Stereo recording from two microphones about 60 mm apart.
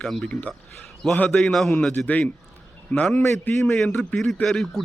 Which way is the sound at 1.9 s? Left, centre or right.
Left.